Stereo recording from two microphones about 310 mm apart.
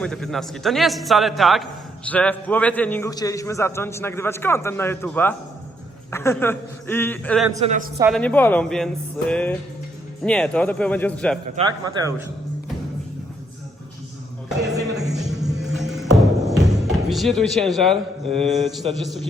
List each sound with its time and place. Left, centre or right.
0.0 s a man's voice: centre
7.5 s a man's voice: right
7.9 s a man's voice: centre
11.4 s speech: centre
14.8 s a sound: centre
15.7 s music: centre
16.8 s a man's voice: centre